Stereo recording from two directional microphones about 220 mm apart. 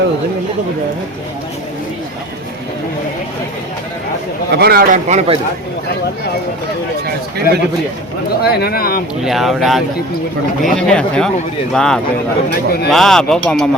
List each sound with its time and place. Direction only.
4.5 s a man's voice: 45° right (ahead or behind)
7.5 s speech: 40° left (ahead or behind)
9.2 s speech: centre (ahead or behind)
12.5 s speech: 45° left (ahead or behind)
12.9 s speech: centre (ahead or behind)